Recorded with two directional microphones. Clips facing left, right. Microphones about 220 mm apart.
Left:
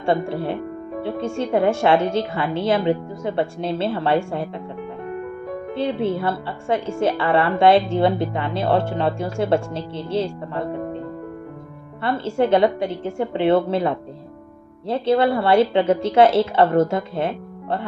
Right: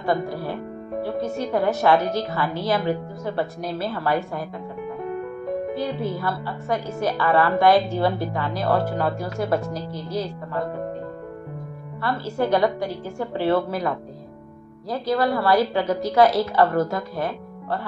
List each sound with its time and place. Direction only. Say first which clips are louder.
0.0 s speech: left 3 dB; 25° left (ahead or behind)
5.8 s speech: left 4 dB; 25° left (ahead or behind)
12.0 s speech: left 4 dB; 25° left (ahead or behind)